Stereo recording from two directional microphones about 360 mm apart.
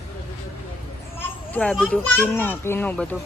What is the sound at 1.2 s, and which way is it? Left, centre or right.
A child's voice, centre.